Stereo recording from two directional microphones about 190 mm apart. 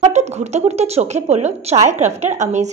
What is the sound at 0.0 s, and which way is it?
A woman's voice, 35° right (ahead or behind).